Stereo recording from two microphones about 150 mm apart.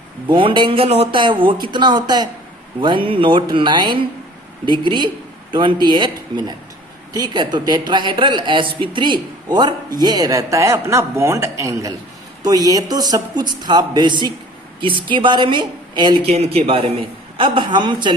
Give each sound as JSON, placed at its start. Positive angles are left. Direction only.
{"t": 0.3, "sound": "speech", "side_deg": -35}
{"t": 16.2, "sound": "speech", "side_deg": -40}